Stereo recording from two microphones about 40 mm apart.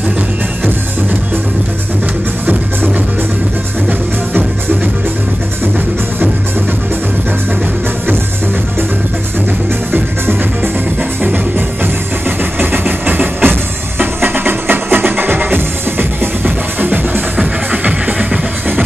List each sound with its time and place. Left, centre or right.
12.5 s music: right
17.4 s music: right